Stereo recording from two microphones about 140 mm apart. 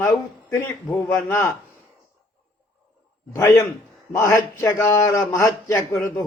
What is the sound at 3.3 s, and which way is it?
A man's voice, 20° left (ahead or behind).